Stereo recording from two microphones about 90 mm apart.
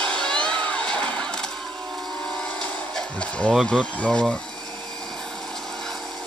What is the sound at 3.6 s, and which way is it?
Speech, 10° left (ahead or behind).